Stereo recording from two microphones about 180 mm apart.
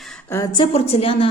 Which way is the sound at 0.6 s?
35° left (ahead or behind).